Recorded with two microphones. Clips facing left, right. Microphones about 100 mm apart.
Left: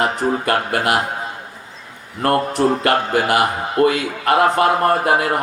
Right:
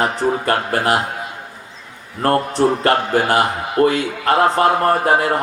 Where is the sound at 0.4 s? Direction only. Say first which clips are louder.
Right 1 dB; 35° right (ahead or behind).